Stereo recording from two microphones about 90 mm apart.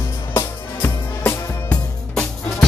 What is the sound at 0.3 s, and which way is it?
Music, 30° left (ahead or behind).